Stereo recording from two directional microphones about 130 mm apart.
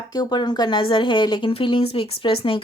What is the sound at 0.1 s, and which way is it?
A woman's voice, 30° left (ahead or behind).